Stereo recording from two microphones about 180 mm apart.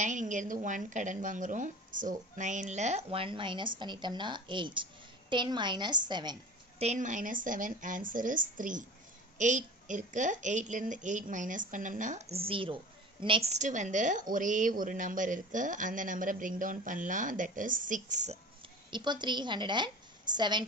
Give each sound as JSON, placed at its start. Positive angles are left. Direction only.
{"t": 0.0, "sound": "speech", "side_deg": -45}
{"t": 6.8, "sound": "speech", "side_deg": -40}
{"t": 12.4, "sound": "a woman's voice", "side_deg": -30}
{"t": 18.9, "sound": "a woman's voice", "side_deg": -25}